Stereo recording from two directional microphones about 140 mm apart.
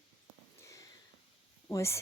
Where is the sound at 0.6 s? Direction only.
25° left (ahead or behind).